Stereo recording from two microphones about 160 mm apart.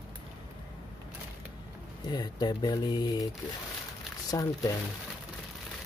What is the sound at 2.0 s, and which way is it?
Speech, 25° left (ahead or behind).